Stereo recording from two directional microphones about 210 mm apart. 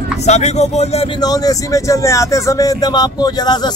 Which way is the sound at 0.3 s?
30° left (ahead or behind).